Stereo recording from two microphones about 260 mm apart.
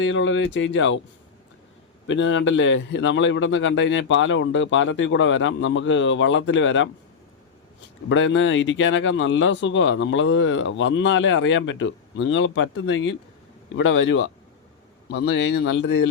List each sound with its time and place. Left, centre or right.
0.0 s speech: left
2.0 s speech: left
8.1 s a man's voice: left